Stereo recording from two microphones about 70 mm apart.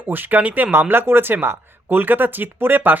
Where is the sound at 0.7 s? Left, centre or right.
Right.